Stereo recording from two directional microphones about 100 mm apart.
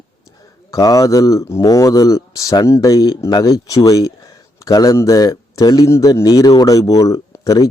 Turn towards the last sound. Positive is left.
turn(degrees=35)  # may be behind; listen again after turning